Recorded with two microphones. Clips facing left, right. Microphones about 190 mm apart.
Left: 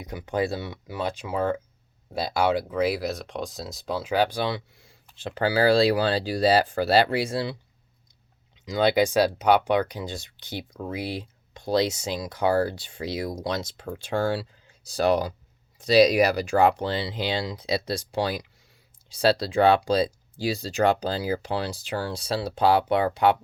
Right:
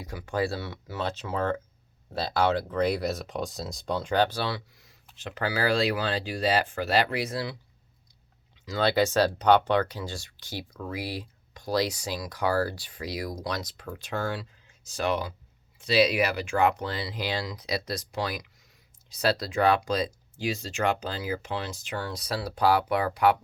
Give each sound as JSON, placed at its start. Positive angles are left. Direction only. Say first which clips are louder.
{"t": 0.0, "sound": "speech", "louder": "left 2 dB", "side_deg": 20}
{"t": 8.6, "sound": "speech", "louder": "left 3 dB", "side_deg": 15}